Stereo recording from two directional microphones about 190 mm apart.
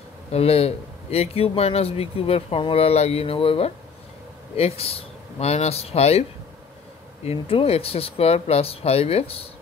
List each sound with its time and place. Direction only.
0.3 s speech: 30° left (ahead or behind)
7.2 s speech: 30° left (ahead or behind)